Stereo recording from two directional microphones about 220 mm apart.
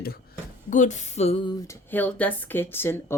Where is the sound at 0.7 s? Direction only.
35° left (ahead or behind).